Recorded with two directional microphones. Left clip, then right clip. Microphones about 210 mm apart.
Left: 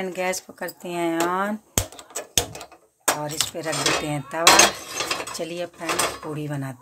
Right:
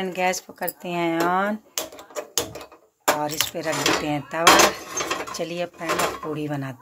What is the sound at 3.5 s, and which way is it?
Speech, 5° left (ahead or behind).